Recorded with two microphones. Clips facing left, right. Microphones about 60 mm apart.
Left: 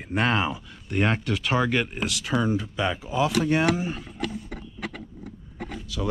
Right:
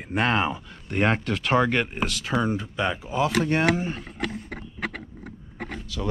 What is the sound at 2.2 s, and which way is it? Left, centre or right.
Speech, right.